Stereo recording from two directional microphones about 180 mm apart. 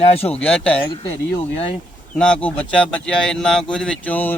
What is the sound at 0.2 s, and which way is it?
Speech, 5° left (ahead or behind).